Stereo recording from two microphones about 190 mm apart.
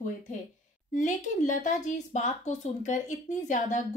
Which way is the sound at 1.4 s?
40° left (ahead or behind).